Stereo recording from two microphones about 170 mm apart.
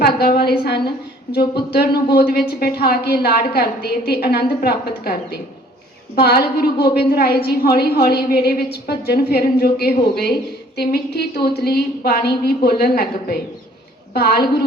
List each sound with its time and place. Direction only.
0.0 s a woman's voice: 65° left (ahead or behind)